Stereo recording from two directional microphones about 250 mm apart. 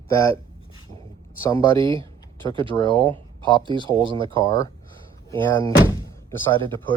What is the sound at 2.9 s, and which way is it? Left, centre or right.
Speech, centre.